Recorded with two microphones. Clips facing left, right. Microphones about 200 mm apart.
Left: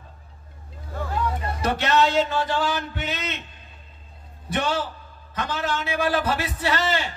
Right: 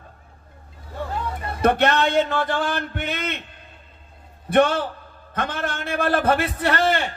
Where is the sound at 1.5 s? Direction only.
55° right (ahead or behind).